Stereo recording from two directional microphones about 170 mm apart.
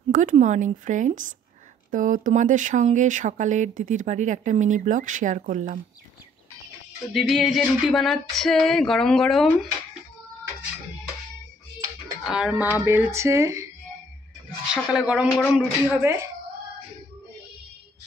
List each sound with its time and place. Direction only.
0.1 s speech: 50° right (ahead or behind)
7.2 s speech: centre (ahead or behind)
12.2 s speech: 5° right (ahead or behind)
14.7 s speech: 5° right (ahead or behind)